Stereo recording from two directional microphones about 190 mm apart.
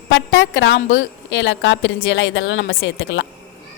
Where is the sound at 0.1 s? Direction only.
75° left (ahead or behind).